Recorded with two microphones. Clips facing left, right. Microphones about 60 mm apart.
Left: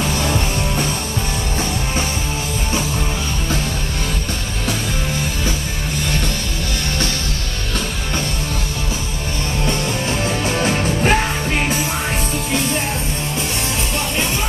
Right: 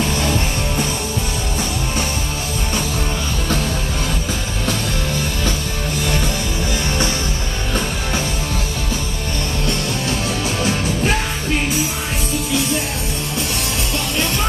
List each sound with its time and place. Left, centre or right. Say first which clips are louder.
10.2 s music: left 4 dB; left